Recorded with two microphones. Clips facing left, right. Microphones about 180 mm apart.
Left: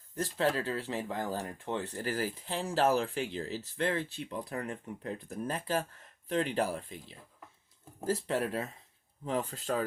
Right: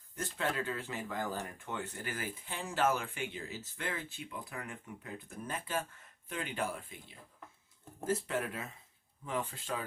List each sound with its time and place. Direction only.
0.2 s speech: 35° left (ahead or behind)
8.0 s speech: 35° left (ahead or behind)